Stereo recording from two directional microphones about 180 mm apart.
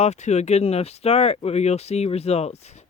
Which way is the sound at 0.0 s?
40° left (ahead or behind).